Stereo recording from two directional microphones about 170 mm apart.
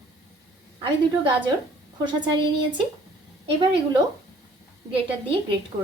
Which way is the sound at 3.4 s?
30° right (ahead or behind).